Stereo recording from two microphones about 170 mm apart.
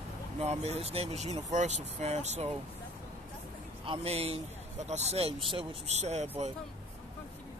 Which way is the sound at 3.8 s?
35° right (ahead or behind).